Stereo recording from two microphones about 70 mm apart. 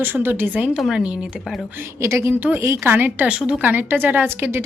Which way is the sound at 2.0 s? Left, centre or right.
Right.